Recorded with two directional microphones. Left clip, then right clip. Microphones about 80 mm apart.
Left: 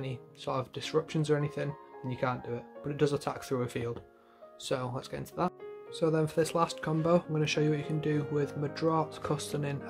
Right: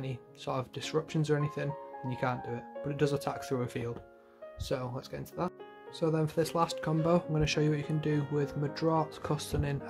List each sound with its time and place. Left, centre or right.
0.0 s speech: centre
2.1 s speech: right; by 4.0 s centre
4.6 s speech: centre
5.9 s speech: centre; by 7.4 s right
7.4 s speech: right